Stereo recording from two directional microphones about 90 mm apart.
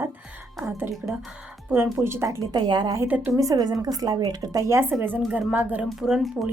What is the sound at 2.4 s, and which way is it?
A woman's voice, 55° right (ahead or behind).